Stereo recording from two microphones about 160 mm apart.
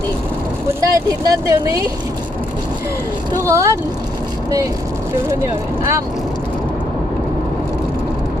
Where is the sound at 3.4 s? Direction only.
15° right (ahead or behind).